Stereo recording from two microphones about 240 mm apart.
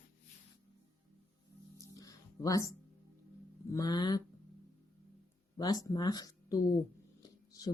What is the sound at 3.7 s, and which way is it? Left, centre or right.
Speech, centre.